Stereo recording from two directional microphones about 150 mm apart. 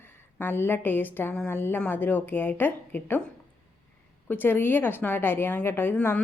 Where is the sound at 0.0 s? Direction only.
15° left (ahead or behind).